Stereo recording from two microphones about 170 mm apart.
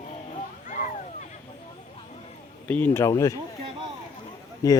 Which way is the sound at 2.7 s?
10° left (ahead or behind).